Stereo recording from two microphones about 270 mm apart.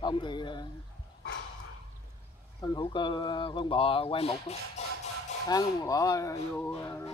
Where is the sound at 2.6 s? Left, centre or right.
Centre.